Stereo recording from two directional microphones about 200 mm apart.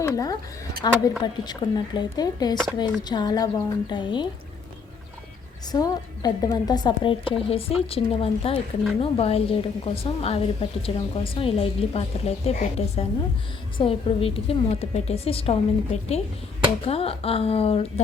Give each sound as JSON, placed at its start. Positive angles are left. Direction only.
{"t": 0.0, "sound": "a sound", "side_deg": 15}
{"t": 0.8, "sound": "a woman's voice", "side_deg": 20}
{"t": 5.8, "sound": "a woman's voice", "side_deg": 20}